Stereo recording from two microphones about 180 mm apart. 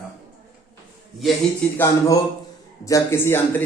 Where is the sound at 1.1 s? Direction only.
Centre (ahead or behind).